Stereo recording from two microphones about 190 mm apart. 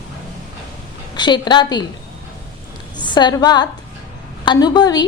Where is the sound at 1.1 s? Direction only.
25° left (ahead or behind).